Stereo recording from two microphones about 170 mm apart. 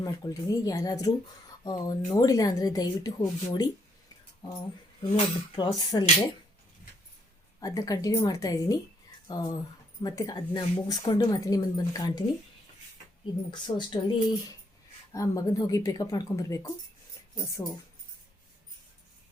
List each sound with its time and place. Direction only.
0.0 s a woman's voice: 20° left (ahead or behind)
5.0 s a woman's voice: 30° left (ahead or behind)
7.6 s a woman's voice: 20° left (ahead or behind)
13.5 s a woman's voice: 25° left (ahead or behind)